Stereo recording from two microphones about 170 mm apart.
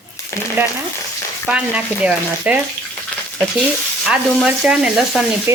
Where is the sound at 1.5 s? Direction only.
5° right (ahead or behind).